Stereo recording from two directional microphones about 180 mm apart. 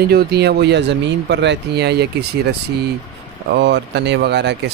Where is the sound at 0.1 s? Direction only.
60° right (ahead or behind).